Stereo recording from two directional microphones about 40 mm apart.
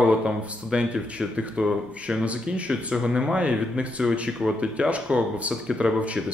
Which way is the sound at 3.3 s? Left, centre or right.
Right.